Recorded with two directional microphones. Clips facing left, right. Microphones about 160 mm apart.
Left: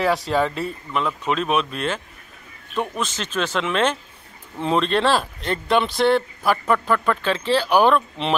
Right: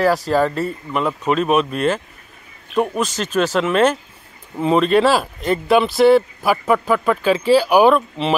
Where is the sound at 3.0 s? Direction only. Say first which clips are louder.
Right 6 dB; 5° right (ahead or behind).